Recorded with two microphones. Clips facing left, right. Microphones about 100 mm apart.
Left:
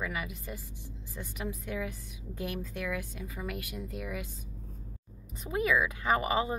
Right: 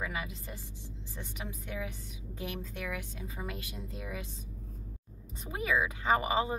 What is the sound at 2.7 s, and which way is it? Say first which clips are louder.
A woman's voice: left 3 dB; 25° right (ahead or behind).